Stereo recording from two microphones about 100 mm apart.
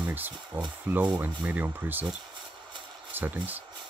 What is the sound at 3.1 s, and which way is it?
Speech, 15° right (ahead or behind).